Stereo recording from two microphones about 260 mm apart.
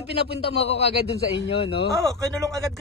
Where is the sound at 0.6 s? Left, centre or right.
Left.